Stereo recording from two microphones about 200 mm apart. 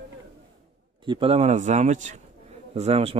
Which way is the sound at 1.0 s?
25° right (ahead or behind).